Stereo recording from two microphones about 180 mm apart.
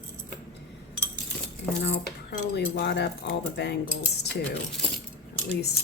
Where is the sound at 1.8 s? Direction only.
75° left (ahead or behind).